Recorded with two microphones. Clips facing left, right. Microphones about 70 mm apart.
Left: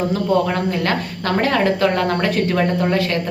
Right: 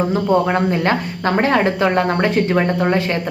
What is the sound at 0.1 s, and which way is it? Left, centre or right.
A woman's voice, right.